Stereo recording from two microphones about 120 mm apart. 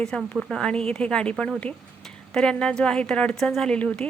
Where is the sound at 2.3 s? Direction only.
5° left (ahead or behind).